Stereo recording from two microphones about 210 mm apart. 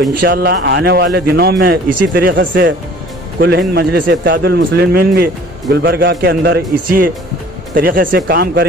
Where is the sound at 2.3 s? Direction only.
60° right (ahead or behind).